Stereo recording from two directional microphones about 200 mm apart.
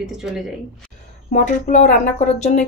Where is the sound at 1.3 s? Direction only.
40° left (ahead or behind).